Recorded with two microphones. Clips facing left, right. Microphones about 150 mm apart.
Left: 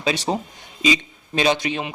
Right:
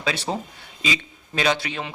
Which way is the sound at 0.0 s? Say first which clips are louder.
Left 4 dB; 20° left (ahead or behind).